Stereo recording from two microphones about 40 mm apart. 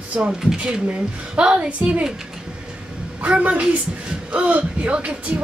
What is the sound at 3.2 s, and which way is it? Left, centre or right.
A woman's voice, right.